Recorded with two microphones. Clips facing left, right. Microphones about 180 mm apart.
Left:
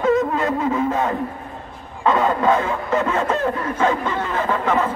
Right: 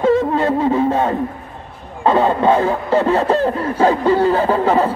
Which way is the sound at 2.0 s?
30° right (ahead or behind).